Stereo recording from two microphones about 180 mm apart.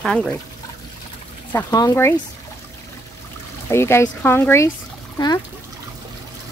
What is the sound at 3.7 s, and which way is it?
Speech, 15° left (ahead or behind).